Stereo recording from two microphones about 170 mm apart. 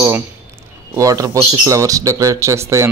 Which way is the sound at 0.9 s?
20° right (ahead or behind).